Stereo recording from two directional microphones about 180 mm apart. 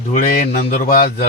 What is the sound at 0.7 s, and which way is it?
Speech, 50° left (ahead or behind).